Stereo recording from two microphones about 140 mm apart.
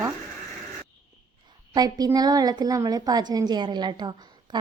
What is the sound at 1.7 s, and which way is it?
A woman's voice, 25° right (ahead or behind).